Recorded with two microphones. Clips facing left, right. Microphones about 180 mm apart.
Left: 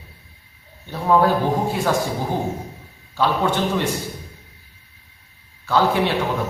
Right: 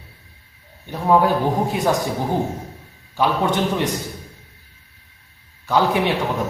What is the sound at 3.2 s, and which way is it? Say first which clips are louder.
Speech: right 1 dB; 15° right (ahead or behind).